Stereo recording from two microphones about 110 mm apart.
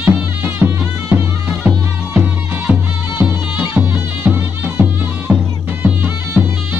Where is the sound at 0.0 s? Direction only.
15° right (ahead or behind).